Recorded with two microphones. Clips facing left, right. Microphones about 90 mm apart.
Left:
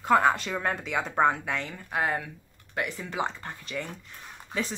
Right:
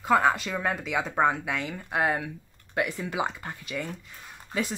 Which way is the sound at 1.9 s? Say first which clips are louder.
Right 2 dB; 15° right (ahead or behind).